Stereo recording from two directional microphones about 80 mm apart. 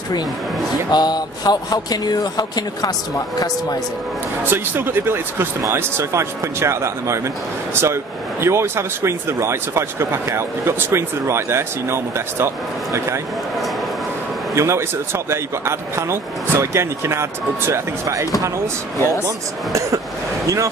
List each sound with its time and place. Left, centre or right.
0.9 s speech: left
4.5 s speech: right
14.5 s speech: right
19.2 s speech: right